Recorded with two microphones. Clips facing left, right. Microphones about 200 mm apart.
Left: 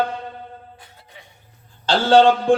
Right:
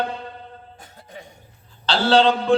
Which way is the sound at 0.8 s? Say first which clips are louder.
Right 6 dB; 45° right (ahead or behind).